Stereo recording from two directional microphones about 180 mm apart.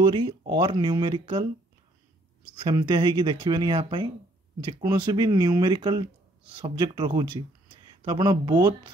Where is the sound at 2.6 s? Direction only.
25° right (ahead or behind).